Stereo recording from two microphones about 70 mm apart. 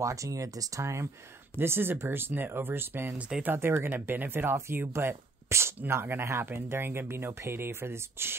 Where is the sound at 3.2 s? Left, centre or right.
Centre.